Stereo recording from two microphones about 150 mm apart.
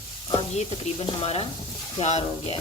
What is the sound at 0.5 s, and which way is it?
Speech, 45° left (ahead or behind).